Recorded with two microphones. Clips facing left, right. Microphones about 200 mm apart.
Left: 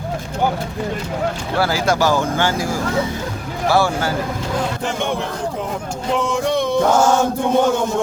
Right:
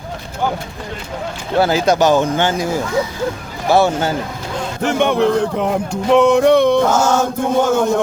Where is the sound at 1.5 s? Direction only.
20° right (ahead or behind).